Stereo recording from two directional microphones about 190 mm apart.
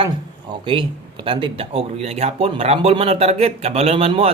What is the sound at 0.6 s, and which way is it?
Speech, 25° right (ahead or behind).